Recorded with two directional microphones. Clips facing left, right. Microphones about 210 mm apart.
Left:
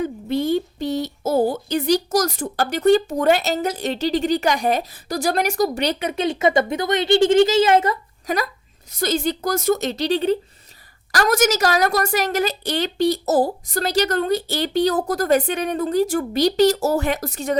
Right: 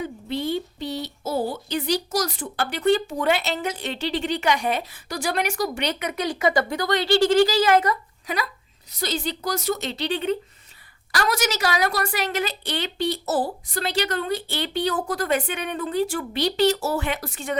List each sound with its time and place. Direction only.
0.0 s speech: 45° left (ahead or behind); by 7.9 s 25° left (ahead or behind)
8.9 s a woman's voice: 45° left (ahead or behind)